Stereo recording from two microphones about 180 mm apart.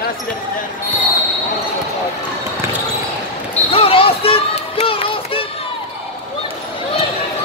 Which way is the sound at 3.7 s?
30° left (ahead or behind).